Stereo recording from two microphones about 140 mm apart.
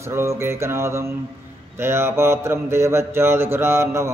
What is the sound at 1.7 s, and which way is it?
Mantra, 15° right (ahead or behind).